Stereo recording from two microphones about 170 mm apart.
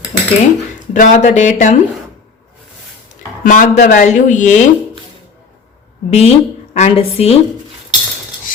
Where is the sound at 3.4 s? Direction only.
50° left (ahead or behind).